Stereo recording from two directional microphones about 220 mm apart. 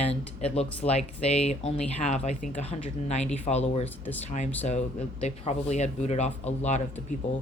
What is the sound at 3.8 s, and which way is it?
Speech, 10° left (ahead or behind).